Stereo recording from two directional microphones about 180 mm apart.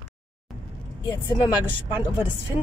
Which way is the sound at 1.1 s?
25° left (ahead or behind).